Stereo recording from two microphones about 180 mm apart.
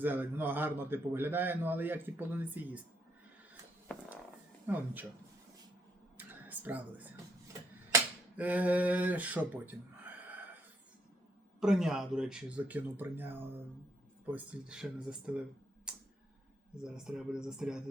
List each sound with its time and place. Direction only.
0.0 s a man's voice: 10° right (ahead or behind)
4.6 s a man's voice: 10° right (ahead or behind)
6.1 s a sound: 10° right (ahead or behind)
8.4 s speech: 10° right (ahead or behind)
11.6 s a man's voice: 5° right (ahead or behind)
16.7 s speech: 5° right (ahead or behind)